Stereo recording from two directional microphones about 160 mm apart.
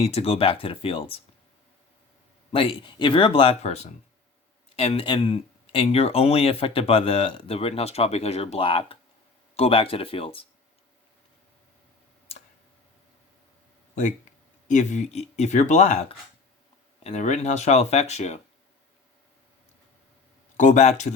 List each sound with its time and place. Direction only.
0.0 s speech: 40° left (ahead or behind)
2.5 s speech: 35° left (ahead or behind)
12.3 s tick: 40° left (ahead or behind)
14.7 s speech: 50° left (ahead or behind)
20.6 s speech: 45° left (ahead or behind)